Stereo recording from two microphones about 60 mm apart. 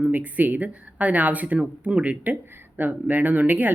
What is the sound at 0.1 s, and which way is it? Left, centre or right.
Speech, right.